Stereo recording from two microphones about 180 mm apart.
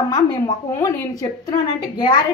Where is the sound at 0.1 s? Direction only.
20° left (ahead or behind).